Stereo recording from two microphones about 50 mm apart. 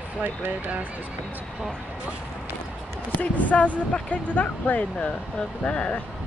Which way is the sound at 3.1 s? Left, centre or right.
Left.